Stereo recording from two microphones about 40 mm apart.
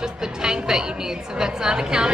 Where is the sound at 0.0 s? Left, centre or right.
Centre.